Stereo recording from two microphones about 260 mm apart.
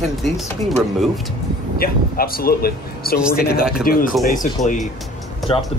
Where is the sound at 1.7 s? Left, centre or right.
Left.